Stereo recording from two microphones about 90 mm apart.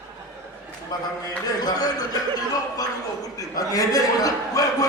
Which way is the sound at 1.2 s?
45° left (ahead or behind).